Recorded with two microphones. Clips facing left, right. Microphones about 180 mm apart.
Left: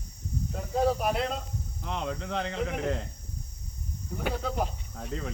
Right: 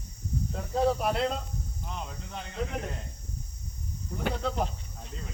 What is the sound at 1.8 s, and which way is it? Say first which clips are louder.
Speech: left 9 dB; 90° left.